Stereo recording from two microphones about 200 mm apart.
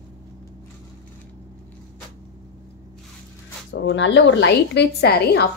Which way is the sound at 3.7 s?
60° left (ahead or behind).